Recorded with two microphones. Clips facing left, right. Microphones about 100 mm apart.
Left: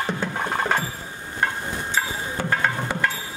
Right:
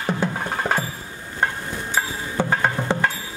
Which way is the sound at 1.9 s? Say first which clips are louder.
Right 2 dB; 20° right (ahead or behind).